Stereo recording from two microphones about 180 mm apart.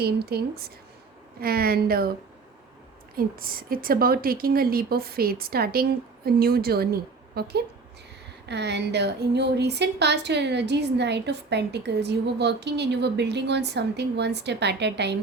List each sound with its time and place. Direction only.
0.0 s a woman's voice: 60° right (ahead or behind)
3.2 s a woman's voice: 55° right (ahead or behind); by 15.2 s 70° right (ahead or behind)